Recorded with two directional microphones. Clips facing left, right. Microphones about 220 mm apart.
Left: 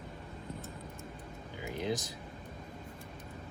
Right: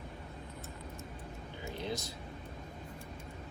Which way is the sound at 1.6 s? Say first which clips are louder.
Left 4 dB; 15° left (ahead or behind).